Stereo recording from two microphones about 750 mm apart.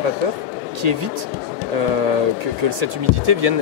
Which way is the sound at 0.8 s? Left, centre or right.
Right.